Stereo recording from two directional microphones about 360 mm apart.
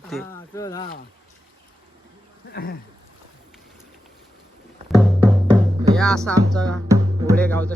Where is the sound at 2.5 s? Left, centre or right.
Left.